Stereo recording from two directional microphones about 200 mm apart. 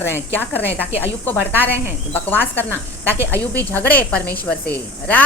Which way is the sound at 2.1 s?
10° left (ahead or behind).